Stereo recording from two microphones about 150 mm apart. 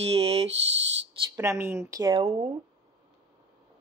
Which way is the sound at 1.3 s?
20° right (ahead or behind).